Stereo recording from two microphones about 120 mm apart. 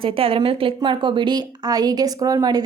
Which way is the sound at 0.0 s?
50° right (ahead or behind).